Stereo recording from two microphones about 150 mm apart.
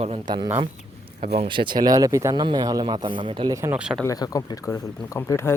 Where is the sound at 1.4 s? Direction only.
35° right (ahead or behind).